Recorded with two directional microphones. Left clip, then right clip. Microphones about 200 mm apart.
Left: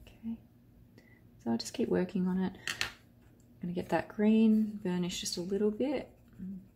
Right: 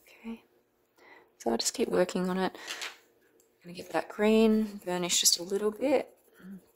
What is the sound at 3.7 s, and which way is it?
Speech, 35° right (ahead or behind).